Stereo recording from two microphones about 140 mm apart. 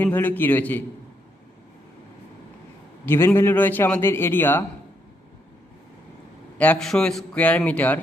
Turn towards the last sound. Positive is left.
turn(degrees=10)  # may be behind; listen again after turning